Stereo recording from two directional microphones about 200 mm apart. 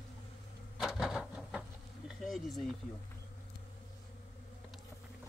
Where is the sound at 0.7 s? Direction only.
Centre (ahead or behind).